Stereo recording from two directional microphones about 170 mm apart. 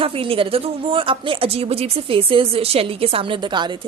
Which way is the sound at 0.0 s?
35° right (ahead or behind).